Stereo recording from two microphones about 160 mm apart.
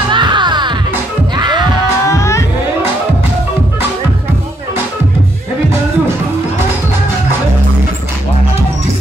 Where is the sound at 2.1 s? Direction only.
20° left (ahead or behind).